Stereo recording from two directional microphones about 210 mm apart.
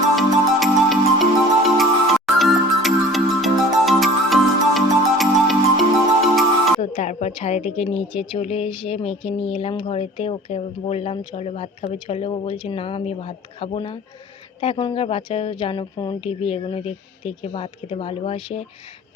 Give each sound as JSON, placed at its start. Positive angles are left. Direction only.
{"t": 0.2, "sound": "music", "side_deg": 0}
{"t": 6.9, "sound": "a woman's voice", "side_deg": 35}